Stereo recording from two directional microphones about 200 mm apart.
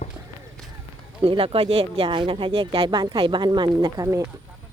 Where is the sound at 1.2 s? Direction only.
30° right (ahead or behind).